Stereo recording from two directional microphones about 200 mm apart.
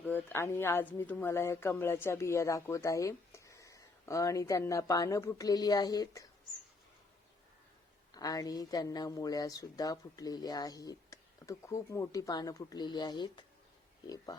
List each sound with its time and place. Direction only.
0.0 s speech: 10° left (ahead or behind)
8.1 s a woman's voice: 20° left (ahead or behind)